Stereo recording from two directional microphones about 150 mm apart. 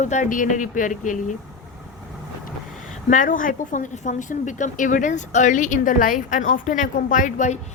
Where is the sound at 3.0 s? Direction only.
60° left (ahead or behind).